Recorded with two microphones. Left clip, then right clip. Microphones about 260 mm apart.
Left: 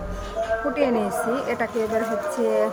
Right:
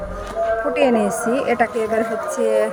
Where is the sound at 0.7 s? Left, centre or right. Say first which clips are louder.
Right 6 dB; centre.